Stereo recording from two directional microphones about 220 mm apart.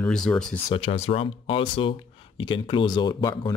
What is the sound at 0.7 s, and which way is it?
Speech, 25° left (ahead or behind).